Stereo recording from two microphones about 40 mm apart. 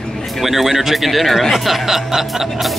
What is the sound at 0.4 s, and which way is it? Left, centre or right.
Speech, centre.